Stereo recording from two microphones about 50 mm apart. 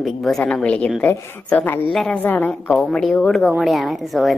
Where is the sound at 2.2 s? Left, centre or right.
Left.